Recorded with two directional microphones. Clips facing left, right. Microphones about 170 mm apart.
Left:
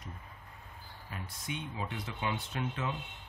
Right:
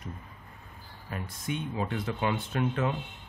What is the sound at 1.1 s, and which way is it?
Speech, 55° right (ahead or behind).